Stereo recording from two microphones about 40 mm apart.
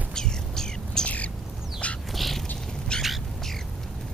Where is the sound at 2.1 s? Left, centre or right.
Centre.